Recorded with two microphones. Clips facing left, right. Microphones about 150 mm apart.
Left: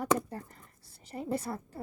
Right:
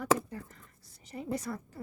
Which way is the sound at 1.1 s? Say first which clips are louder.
Left 2 dB; 35° left (ahead or behind).